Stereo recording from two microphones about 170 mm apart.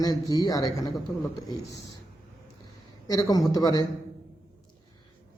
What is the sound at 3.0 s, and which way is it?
Speech, 20° left (ahead or behind).